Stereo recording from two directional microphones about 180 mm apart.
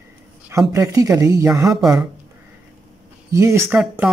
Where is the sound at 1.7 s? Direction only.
Centre (ahead or behind).